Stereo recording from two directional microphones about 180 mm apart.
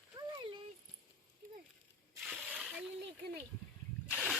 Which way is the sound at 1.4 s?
50° right (ahead or behind).